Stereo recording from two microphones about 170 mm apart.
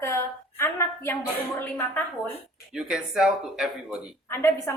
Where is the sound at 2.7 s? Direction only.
5° right (ahead or behind).